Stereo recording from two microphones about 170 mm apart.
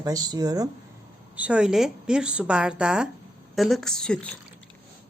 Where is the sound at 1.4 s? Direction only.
5° right (ahead or behind).